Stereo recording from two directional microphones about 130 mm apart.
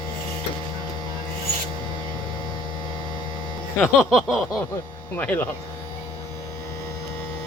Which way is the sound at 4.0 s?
Centre (ahead or behind).